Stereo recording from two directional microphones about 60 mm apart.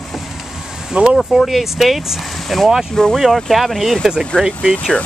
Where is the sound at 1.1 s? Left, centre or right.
Centre.